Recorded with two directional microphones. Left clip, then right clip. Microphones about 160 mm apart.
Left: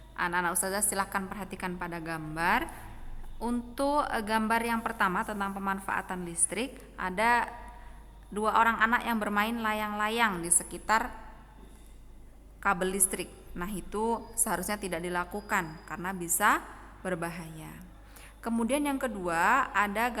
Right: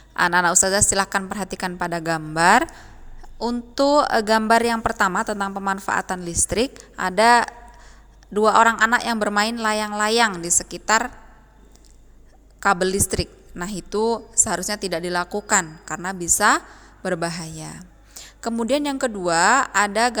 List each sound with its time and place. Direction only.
0.1 s a woman's voice: 45° right (ahead or behind)
3.8 s a woman's voice: 35° right (ahead or behind)
12.5 s a woman's voice: 35° right (ahead or behind)